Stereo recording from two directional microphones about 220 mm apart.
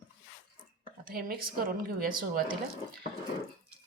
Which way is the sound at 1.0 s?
40° right (ahead or behind).